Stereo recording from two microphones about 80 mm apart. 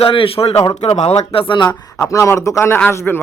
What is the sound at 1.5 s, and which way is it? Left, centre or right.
Speech, left.